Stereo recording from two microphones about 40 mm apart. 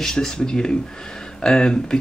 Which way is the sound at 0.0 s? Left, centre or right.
Centre.